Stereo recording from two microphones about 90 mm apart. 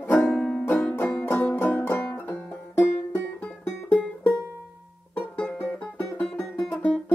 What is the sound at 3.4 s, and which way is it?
Music, 15° left (ahead or behind).